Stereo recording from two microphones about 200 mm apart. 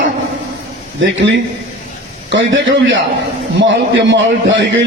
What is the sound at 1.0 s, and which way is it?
A man's voice, 70° right (ahead or behind).